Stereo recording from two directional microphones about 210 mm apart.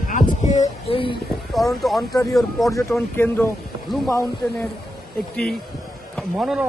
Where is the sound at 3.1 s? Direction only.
10° left (ahead or behind).